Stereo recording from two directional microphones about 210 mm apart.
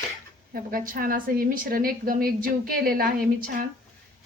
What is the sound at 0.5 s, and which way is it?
A woman's voice, 45° right (ahead or behind).